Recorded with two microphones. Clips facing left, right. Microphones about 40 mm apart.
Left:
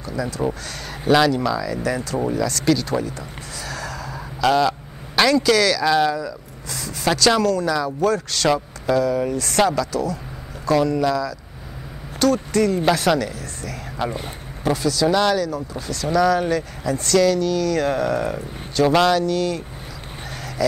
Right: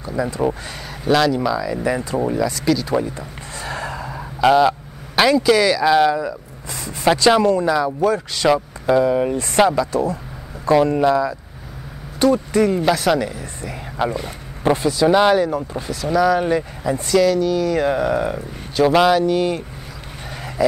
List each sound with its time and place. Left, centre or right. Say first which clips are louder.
0.0 s speech: right 3 dB; right
1.0 s speech: even; centre
1.3 s speech: right 2 dB; centre
1.8 s speech: right 2 dB; right
2.6 s speech: left 2 dB; centre
2.9 s gasp: right 3 dB; right
4.5 s speech: right 4 dB; centre
8.9 s speech: right 3 dB; right
12.8 s speech: right 1 dB; centre
13.2 s speech: right 2 dB; right
14.6 s speech: right 3 dB; right
15.9 s speech: right 1 dB; centre
17.1 s speech: right 1 dB; centre